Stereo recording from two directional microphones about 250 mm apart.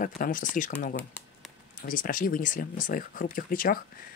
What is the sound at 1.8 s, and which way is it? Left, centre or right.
Speech, left.